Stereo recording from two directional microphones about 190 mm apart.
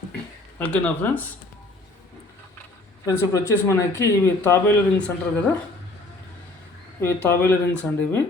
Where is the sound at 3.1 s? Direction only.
15° left (ahead or behind).